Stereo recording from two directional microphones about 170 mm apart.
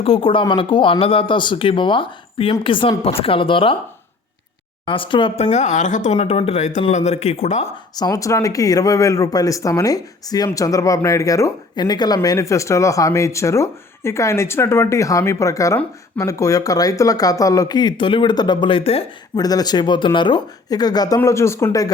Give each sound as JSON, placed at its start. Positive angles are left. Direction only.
{"t": 0.0, "sound": "speech", "side_deg": 30}
{"t": 4.9, "sound": "speech", "side_deg": 30}
{"t": 5.5, "sound": "speech", "side_deg": 45}
{"t": 7.9, "sound": "speech", "side_deg": 20}
{"t": 19.4, "sound": "speech", "side_deg": 20}